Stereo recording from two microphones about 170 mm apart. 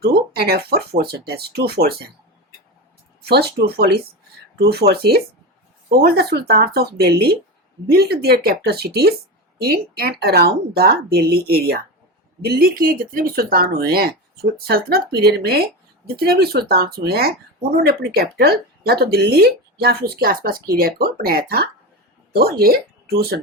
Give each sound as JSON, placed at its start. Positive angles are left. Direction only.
{"t": 0.0, "sound": "speech", "side_deg": -65}
{"t": 3.2, "sound": "speech", "side_deg": -70}